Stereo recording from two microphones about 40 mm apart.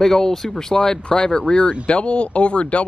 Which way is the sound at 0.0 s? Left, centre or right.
Centre.